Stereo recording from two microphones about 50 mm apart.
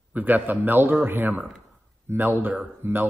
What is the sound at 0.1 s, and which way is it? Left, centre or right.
Speech, right.